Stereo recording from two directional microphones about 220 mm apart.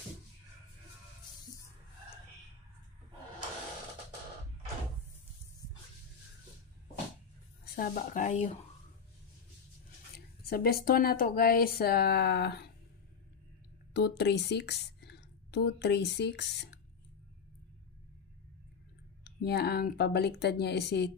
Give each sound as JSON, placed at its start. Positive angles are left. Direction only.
{"t": 7.6, "sound": "speech", "side_deg": 40}
{"t": 10.1, "sound": "speech", "side_deg": 45}
{"t": 13.9, "sound": "a woman's voice", "side_deg": 50}
{"t": 19.2, "sound": "speech", "side_deg": 50}